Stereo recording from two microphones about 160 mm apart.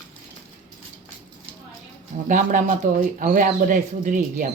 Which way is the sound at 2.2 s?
55° right (ahead or behind).